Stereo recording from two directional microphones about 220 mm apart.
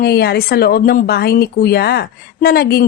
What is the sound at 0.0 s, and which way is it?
A woman's voice, 45° left (ahead or behind).